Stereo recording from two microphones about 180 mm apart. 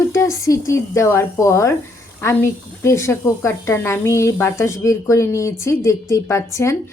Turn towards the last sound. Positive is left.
turn(degrees=15)  # may be behind; listen again after turning